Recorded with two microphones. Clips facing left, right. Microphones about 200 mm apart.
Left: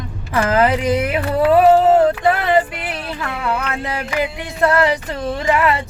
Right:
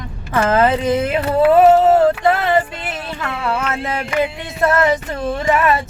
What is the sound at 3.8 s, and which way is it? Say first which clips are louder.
Music: right 3 dB; 25° right (ahead or behind).